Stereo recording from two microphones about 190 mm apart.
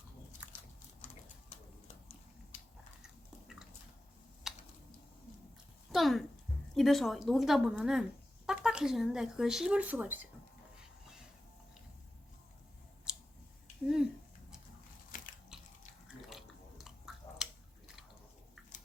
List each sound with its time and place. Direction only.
0.4 s biting: 5° right (ahead or behind)
3.0 s biting: 5° right (ahead or behind)
4.4 s typing: centre (ahead or behind)
5.9 s speech: centre (ahead or behind)
13.8 s a sound: 5° right (ahead or behind)
15.1 s a sound: 45° left (ahead or behind)
16.3 s chewing: centre (ahead or behind)